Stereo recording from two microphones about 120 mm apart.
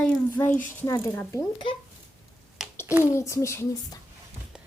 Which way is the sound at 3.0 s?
25° left (ahead or behind).